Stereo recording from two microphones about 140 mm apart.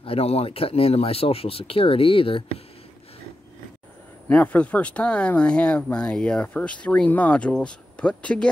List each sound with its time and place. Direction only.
0.0 s speech: 45° left (ahead or behind)
4.3 s speech: 10° left (ahead or behind)